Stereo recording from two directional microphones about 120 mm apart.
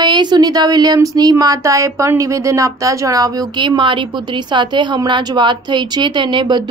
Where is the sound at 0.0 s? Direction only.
40° right (ahead or behind).